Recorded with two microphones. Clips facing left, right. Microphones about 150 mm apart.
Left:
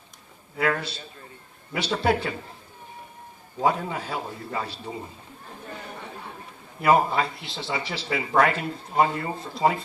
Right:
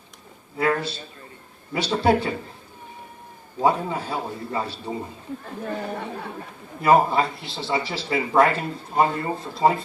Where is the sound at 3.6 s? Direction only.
30° right (ahead or behind).